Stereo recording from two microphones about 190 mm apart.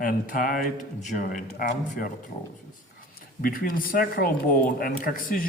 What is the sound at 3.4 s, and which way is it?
Speech, 50° left (ahead or behind).